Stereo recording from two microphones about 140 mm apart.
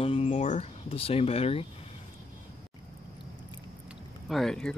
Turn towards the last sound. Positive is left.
turn(degrees=5)  # may be behind; listen again after turning